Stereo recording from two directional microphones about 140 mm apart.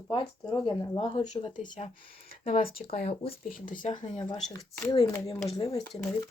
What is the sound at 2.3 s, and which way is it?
Speech, 90° left.